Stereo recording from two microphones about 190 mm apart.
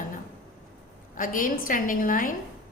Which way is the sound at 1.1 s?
45° left (ahead or behind).